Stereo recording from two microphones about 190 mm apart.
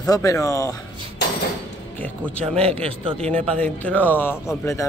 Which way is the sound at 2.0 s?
5° left (ahead or behind).